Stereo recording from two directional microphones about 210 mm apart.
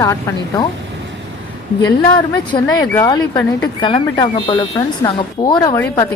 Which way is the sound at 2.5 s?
15° left (ahead or behind).